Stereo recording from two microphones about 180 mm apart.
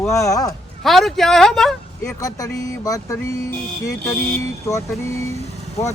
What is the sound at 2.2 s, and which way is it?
A man's voice, 20° left (ahead or behind).